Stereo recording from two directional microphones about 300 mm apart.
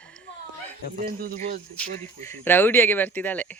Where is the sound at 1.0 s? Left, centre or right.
Right.